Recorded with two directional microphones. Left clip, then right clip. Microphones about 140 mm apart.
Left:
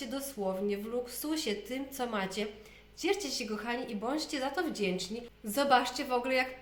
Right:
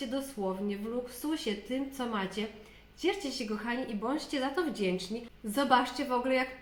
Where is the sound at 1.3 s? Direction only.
30° left (ahead or behind).